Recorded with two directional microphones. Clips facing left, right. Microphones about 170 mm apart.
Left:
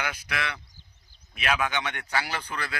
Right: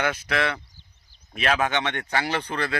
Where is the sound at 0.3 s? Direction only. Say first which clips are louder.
Right 7 dB; 40° right (ahead or behind).